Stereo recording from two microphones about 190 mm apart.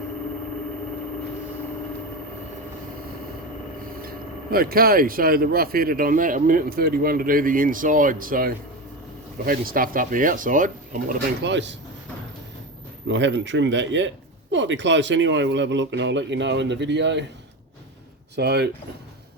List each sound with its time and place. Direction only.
4.5 s speech: 50° right (ahead or behind)
11.4 s speech: 70° right (ahead or behind)
13.1 s speech: 75° right (ahead or behind)
18.3 s speech: 60° right (ahead or behind)